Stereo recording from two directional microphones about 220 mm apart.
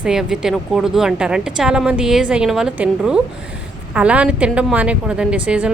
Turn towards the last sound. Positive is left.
turn(degrees=-5)  # may be behind; listen again after turning